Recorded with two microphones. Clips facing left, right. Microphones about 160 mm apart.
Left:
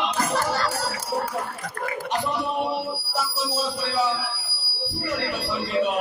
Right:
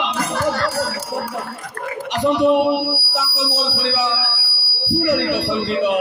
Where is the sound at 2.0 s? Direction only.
90° right.